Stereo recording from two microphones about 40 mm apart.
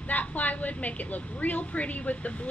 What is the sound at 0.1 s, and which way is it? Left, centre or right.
A woman's voice, left.